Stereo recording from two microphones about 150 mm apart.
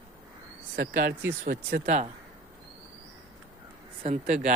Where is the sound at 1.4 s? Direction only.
55° right (ahead or behind).